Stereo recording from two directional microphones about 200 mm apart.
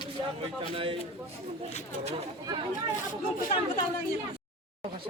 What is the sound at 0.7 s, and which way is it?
Speech, 25° right (ahead or behind).